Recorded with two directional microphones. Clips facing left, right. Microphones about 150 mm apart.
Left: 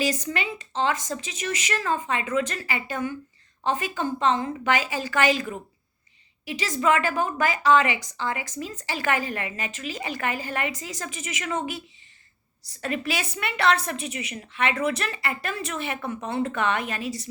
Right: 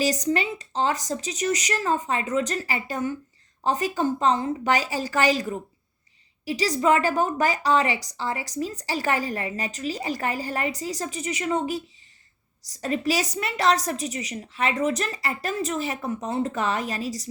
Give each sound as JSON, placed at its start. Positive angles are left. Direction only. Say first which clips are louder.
{"t": 0.0, "sound": "a woman's voice", "louder": "right 3 dB", "side_deg": -35}